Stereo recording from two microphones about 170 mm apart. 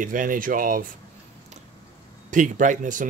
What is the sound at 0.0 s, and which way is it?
Speech, 50° right (ahead or behind).